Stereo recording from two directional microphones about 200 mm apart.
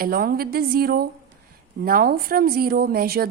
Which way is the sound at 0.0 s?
50° right (ahead or behind).